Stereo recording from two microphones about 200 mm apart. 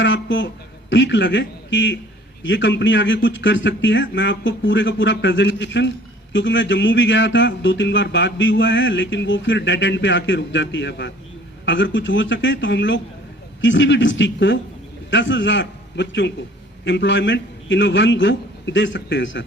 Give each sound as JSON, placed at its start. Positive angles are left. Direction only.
{"t": 0.0, "sound": "a man's voice", "side_deg": 65}